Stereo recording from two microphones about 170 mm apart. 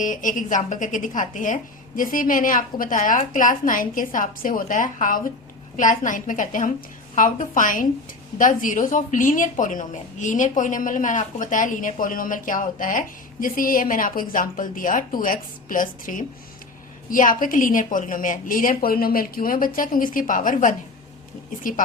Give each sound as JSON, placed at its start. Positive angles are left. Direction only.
{"t": 0.0, "sound": "a woman's voice", "side_deg": 50}